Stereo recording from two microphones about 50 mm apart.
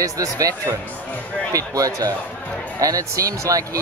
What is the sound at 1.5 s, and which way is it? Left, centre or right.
Speech, right.